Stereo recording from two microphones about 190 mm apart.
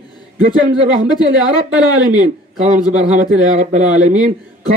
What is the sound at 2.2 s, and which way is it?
A man's voice, 40° right (ahead or behind).